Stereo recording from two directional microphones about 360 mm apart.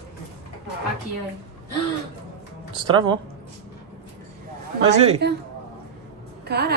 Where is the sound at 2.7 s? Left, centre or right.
Centre.